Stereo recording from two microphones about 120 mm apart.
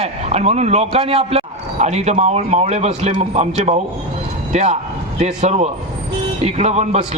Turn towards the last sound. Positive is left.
turn(degrees=-65)  # may be behind; listen again after turning